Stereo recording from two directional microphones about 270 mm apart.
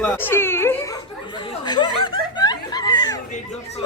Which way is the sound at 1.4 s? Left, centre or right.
Centre.